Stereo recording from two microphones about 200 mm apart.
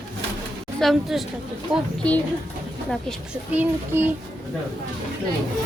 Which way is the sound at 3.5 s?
10° right (ahead or behind).